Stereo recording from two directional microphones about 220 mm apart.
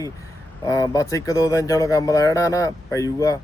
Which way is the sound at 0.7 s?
15° left (ahead or behind).